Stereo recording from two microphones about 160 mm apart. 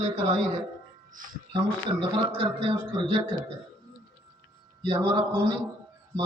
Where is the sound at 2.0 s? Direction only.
35° right (ahead or behind).